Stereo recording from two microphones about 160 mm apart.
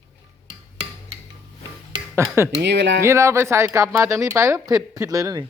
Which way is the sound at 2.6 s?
90° right.